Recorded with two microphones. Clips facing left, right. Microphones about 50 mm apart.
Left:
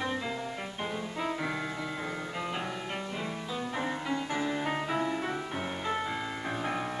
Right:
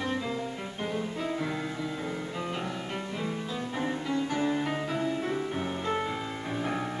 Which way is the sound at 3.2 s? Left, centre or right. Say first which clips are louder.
Right 2 dB; centre.